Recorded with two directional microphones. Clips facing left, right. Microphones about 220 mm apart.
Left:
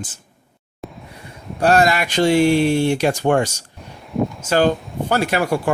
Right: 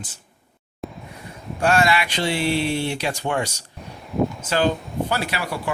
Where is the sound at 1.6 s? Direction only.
40° left (ahead or behind).